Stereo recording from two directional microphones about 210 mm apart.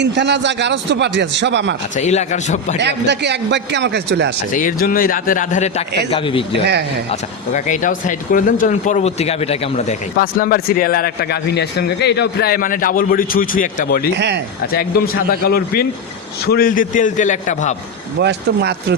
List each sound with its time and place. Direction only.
0.0 s a man's voice: 55° right (ahead or behind)
2.0 s speech: 35° left (ahead or behind)
2.7 s a man's voice: 55° right (ahead or behind)
4.5 s speech: 40° left (ahead or behind); by 6.4 s 25° left (ahead or behind)
7.1 s speech: 35° left (ahead or behind)
14.2 s speech: 55° right (ahead or behind)
14.7 s a man's voice: 45° left (ahead or behind)
18.2 s speech: 50° right (ahead or behind)